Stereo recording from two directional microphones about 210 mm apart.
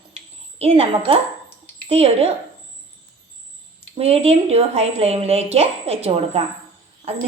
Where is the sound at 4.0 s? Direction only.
30° right (ahead or behind).